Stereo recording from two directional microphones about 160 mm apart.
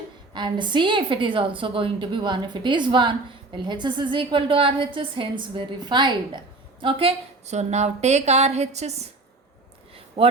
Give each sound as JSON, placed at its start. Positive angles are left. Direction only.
{"t": 0.3, "sound": "a woman's voice", "side_deg": -30}
{"t": 10.2, "sound": "a woman's voice", "side_deg": -35}